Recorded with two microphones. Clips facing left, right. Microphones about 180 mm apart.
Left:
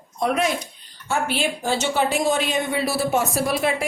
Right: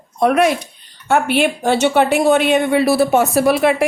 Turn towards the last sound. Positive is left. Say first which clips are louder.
# right 8 dB
turn(degrees=-65)  # may be behind; listen again after turning